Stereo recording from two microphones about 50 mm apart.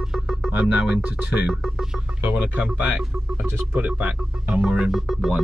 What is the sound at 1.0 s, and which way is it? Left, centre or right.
Speech, right.